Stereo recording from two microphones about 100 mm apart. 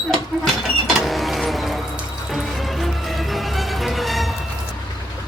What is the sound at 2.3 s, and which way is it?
Music, centre (ahead or behind).